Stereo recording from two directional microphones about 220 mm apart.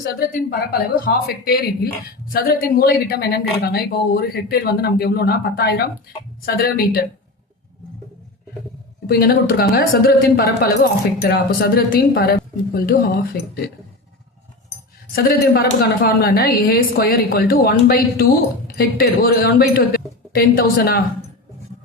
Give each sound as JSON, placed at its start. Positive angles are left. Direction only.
{"t": 0.0, "sound": "a woman's voice", "side_deg": 45}
{"t": 9.0, "sound": "a woman's voice", "side_deg": 45}
{"t": 15.1, "sound": "a woman's voice", "side_deg": 45}